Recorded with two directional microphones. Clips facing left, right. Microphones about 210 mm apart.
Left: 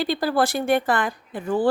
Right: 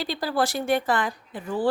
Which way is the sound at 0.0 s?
55° left (ahead or behind).